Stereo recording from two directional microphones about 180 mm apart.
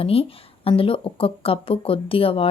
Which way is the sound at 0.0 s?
30° left (ahead or behind).